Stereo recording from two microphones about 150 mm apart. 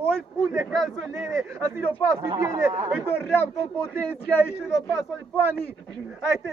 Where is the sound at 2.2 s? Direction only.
25° right (ahead or behind).